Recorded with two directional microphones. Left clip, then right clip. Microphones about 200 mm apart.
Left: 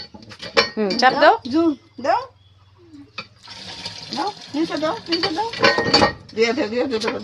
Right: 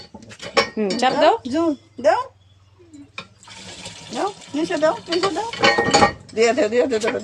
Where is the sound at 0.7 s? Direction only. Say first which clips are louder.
Left 2 dB; 5° right (ahead or behind).